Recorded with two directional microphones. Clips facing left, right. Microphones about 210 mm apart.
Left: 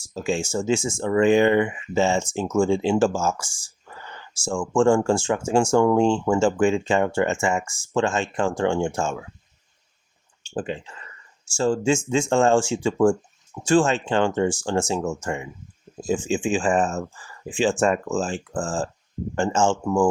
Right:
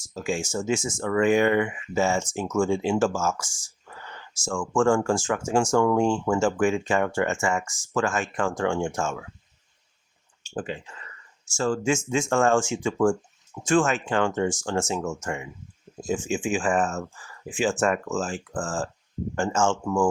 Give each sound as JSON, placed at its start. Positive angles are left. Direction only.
{"t": 0.0, "sound": "speech", "side_deg": 25}
{"t": 10.5, "sound": "speech", "side_deg": 25}